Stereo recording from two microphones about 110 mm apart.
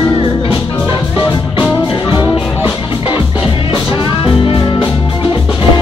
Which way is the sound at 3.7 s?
50° left (ahead or behind).